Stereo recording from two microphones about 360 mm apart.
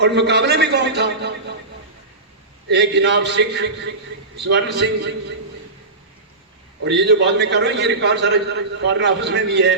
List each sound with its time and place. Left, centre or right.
0.0 s a man's voice: right
2.6 s a man's voice: right
6.8 s a man's voice: right